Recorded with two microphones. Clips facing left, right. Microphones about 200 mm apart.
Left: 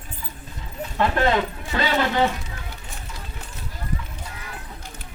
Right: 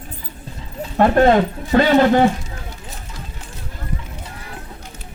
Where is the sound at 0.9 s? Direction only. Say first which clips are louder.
Right 8 dB; 45° right (ahead or behind).